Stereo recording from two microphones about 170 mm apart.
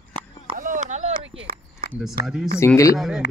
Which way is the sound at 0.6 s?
50° right (ahead or behind).